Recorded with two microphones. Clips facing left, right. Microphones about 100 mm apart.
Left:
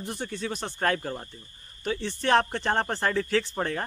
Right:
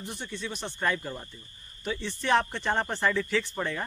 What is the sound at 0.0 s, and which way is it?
Speech, 40° left (ahead or behind).